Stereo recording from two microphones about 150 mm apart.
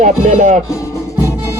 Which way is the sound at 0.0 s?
55° right (ahead or behind).